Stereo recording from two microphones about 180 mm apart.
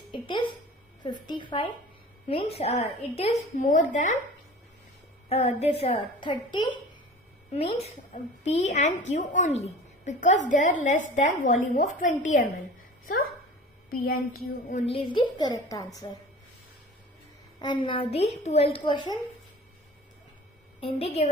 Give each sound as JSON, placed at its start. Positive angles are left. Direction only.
{"t": 0.1, "sound": "a sound", "side_deg": 25}
{"t": 1.0, "sound": "a woman's voice", "side_deg": 25}
{"t": 5.6, "sound": "a woman's voice", "side_deg": 35}
{"t": 7.8, "sound": "speech", "side_deg": 40}
{"t": 13.8, "sound": "a sound", "side_deg": 55}
{"t": 15.0, "sound": "a woman's voice", "side_deg": 25}
{"t": 17.6, "sound": "a woman's voice", "side_deg": 25}
{"t": 20.8, "sound": "a woman's voice", "side_deg": 35}